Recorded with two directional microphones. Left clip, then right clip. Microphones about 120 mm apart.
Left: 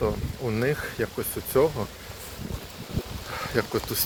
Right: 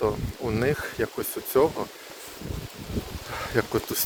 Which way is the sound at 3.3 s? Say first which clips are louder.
Right 1 dB; 55° right (ahead or behind).